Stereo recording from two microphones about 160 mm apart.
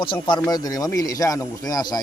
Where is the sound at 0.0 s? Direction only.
30° left (ahead or behind).